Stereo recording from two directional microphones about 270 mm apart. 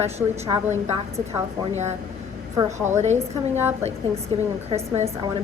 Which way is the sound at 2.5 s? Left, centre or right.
Centre.